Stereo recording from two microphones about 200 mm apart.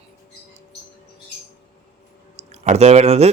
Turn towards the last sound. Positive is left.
turn(degrees=-30)  # may be behind; listen again after turning